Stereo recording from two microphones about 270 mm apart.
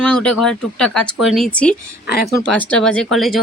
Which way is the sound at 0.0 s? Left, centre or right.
Centre.